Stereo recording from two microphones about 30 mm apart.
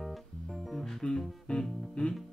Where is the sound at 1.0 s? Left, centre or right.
Centre.